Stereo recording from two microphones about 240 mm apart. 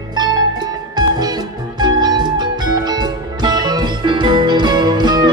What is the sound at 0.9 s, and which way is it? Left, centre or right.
Music, centre.